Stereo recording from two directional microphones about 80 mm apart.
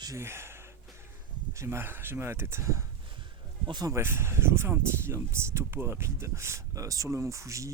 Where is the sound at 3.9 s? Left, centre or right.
Right.